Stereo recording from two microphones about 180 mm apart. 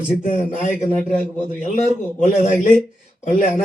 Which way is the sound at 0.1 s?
40° left (ahead or behind).